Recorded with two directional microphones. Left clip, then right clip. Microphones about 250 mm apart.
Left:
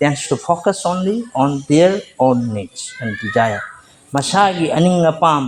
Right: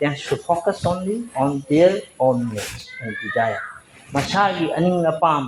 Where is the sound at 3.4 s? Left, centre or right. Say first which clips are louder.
Left 5 dB; left.